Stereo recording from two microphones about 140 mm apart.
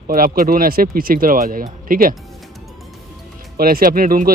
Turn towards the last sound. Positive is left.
turn(degrees=-85)